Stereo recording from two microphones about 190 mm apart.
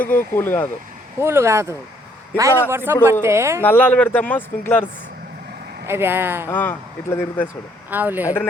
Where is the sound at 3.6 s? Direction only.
10° left (ahead or behind).